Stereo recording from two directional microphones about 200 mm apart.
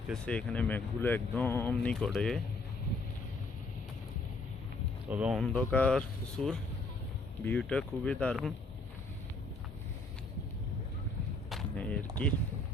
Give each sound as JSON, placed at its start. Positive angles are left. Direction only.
{"t": 0.1, "sound": "speech", "side_deg": 5}
{"t": 5.0, "sound": "speech", "side_deg": -5}
{"t": 5.5, "sound": "speech", "side_deg": 5}
{"t": 11.4, "sound": "speech", "side_deg": 5}